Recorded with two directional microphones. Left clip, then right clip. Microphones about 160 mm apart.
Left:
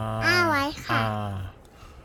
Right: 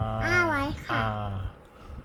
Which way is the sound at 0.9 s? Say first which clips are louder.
Left 1 dB; 75° left (ahead or behind).